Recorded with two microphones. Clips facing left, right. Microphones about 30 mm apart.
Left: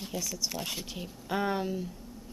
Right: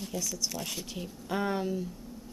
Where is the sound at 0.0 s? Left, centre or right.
Centre.